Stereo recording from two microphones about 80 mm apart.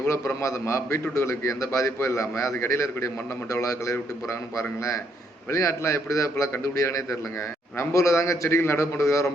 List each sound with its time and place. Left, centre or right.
0.4 s a man's voice: left